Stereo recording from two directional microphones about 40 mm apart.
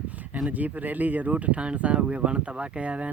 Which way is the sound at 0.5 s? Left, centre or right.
Right.